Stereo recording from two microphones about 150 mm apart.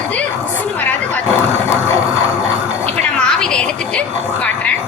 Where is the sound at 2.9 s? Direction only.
5° left (ahead or behind).